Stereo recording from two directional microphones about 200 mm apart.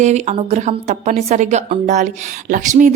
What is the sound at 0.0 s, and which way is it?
A woman's voice, 35° right (ahead or behind).